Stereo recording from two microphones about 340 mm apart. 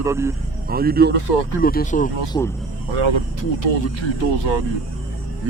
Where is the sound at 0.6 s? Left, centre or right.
Right.